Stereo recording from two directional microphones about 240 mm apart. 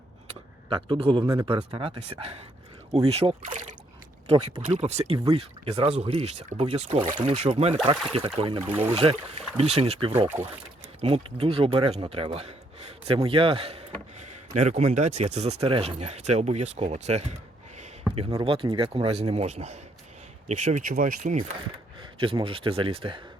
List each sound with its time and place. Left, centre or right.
0.7 s speech: right
8.6 s speech: centre
8.9 s a man's voice: right
22.0 s speech: right